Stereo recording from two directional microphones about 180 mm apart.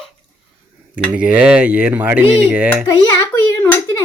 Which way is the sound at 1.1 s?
5° right (ahead or behind).